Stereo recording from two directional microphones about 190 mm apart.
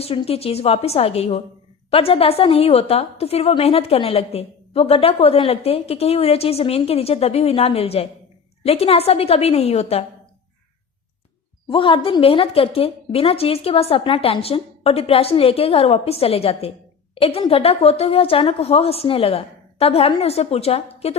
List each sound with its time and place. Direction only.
0.0 s a woman's voice: 30° left (ahead or behind)
11.7 s a woman's voice: 25° left (ahead or behind)